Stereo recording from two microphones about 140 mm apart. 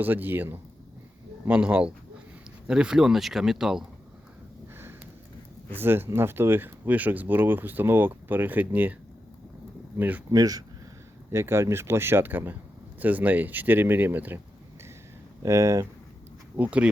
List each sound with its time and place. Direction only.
0.0 s speech: 15° right (ahead or behind)
5.7 s speech: 15° right (ahead or behind)
10.0 s speech: 10° right (ahead or behind)
10.3 s speech: 25° right (ahead or behind)
15.4 s speech: 20° right (ahead or behind)
16.6 s speech: 10° right (ahead or behind)